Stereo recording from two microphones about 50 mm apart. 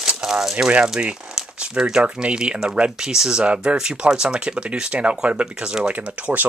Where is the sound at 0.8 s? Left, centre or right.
Centre.